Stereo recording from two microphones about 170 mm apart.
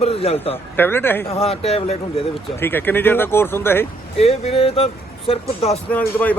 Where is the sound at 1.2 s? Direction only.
35° left (ahead or behind).